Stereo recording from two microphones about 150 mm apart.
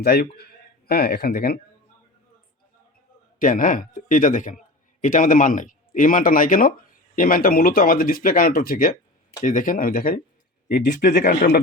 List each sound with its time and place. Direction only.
0.0 s a man's voice: 90° left
3.3 s a man's voice: 65° left (ahead or behind)
9.4 s speech: 60° left (ahead or behind)
10.7 s speech: 80° left